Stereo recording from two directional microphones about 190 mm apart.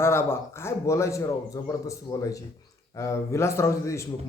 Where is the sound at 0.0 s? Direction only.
15° left (ahead or behind).